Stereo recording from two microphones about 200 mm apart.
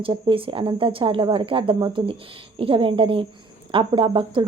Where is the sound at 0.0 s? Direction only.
25° right (ahead or behind).